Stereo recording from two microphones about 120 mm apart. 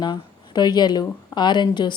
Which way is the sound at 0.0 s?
35° left (ahead or behind).